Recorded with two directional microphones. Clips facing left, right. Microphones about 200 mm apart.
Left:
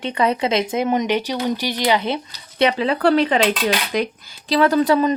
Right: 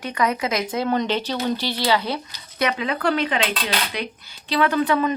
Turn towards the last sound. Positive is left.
turn(degrees=35)  # may be behind; listen again after turning